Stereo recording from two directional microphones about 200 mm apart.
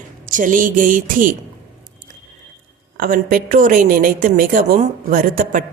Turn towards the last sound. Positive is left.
turn(degrees=-45)  # may be behind; listen again after turning